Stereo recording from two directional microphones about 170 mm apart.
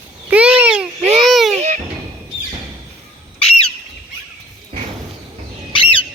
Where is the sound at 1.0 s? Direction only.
35° right (ahead or behind).